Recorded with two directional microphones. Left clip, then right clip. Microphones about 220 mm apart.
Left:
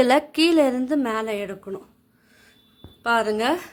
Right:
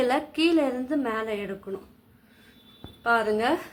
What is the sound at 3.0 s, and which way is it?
Speech, 50° left (ahead or behind).